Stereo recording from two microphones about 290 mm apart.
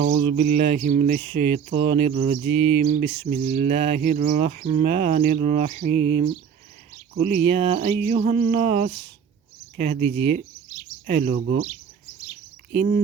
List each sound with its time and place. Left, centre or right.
0.0 s speech: right
12.7 s speech: right